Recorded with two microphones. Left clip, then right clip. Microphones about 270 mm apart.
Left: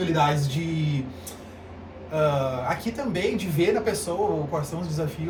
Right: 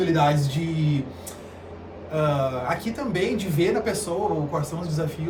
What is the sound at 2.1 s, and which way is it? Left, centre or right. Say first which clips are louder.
Speech: even; centre.